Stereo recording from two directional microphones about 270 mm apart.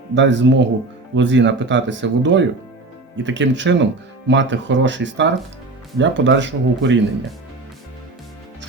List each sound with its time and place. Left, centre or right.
0.1 s speech: right